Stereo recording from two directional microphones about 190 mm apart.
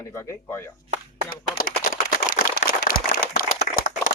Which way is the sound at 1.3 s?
45° left (ahead or behind).